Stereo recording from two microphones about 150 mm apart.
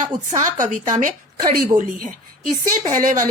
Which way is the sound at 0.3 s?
55° right (ahead or behind).